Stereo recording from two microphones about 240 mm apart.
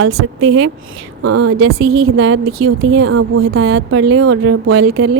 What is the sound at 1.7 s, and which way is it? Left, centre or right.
A woman's voice, right.